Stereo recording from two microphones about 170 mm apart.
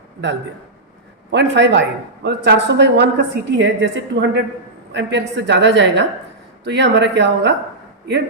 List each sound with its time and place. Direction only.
1.3 s a woman's voice: 90° right